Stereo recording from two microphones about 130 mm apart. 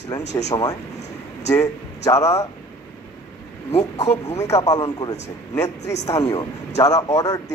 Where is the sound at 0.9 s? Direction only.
60° left (ahead or behind).